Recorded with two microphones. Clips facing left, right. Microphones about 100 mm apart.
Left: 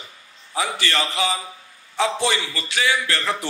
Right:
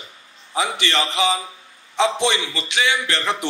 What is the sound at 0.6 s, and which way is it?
A man's voice, 20° right (ahead or behind).